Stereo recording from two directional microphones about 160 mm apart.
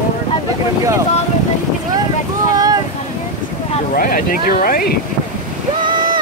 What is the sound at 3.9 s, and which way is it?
Speech, 60° left (ahead or behind).